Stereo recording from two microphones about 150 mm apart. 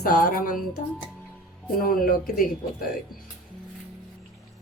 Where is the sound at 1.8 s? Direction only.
75° left (ahead or behind).